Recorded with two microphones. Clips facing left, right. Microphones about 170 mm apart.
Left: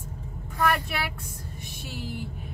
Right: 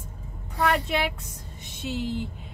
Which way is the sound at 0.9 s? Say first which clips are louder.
Right 5 dB; 20° right (ahead or behind).